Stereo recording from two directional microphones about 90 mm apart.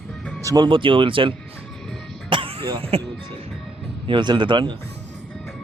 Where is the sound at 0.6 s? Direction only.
70° right (ahead or behind).